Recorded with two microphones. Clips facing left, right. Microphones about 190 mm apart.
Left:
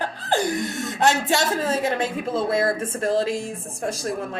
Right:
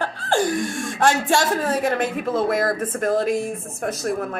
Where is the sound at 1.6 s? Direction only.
25° left (ahead or behind).